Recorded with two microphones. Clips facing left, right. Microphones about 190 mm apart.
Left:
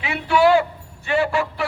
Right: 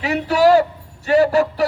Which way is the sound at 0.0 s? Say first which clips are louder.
Right 2 dB; 40° right (ahead or behind).